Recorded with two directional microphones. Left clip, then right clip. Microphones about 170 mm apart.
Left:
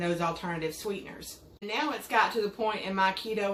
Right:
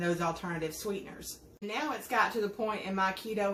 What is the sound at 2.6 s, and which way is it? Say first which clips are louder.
Speech: left 5 dB; 15° left (ahead or behind).